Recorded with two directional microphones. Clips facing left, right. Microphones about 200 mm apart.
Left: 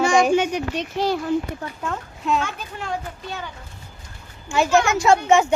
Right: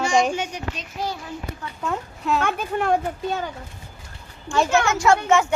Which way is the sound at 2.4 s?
55° right (ahead or behind).